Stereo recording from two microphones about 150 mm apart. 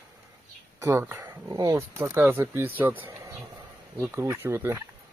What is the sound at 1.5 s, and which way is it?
Speech, 25° right (ahead or behind).